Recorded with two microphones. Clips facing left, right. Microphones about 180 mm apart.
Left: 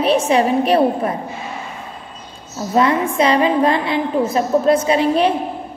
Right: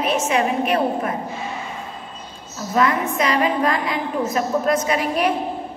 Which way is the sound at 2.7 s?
30° left (ahead or behind).